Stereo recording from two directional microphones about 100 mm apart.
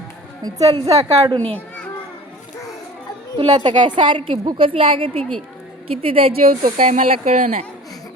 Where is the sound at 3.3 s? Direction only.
50° right (ahead or behind); by 6.3 s 70° right (ahead or behind).